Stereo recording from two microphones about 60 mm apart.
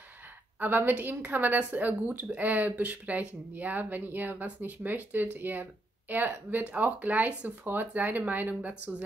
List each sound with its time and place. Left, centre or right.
0.6 s speech: right